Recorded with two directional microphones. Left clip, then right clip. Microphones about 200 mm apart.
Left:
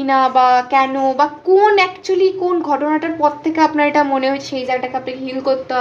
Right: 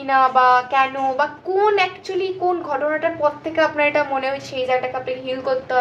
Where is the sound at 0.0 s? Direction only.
35° left (ahead or behind).